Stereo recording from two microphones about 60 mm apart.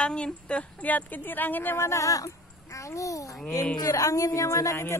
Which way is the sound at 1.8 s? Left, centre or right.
Left.